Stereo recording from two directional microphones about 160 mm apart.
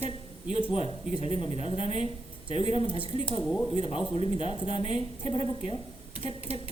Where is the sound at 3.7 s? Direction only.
35° left (ahead or behind).